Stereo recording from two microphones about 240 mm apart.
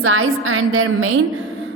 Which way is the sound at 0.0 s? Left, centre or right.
Right.